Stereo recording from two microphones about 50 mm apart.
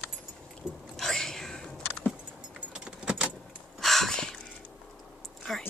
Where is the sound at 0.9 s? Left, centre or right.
Centre.